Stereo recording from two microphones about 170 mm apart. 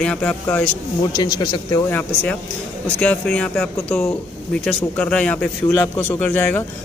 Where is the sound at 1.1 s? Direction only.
25° left (ahead or behind).